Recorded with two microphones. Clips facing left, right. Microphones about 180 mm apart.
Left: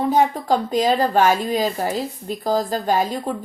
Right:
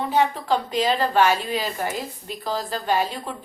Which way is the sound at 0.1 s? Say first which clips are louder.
Left 1 dB; 40° left (ahead or behind).